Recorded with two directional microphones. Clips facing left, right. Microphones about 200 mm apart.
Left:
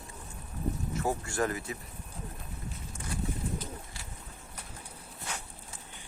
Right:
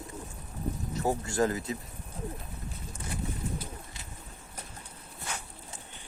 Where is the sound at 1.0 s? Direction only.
20° right (ahead or behind).